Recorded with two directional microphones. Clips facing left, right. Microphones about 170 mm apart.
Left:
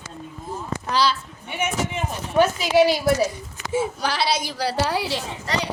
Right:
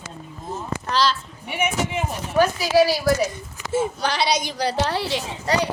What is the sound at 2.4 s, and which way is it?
Speech, 20° left (ahead or behind).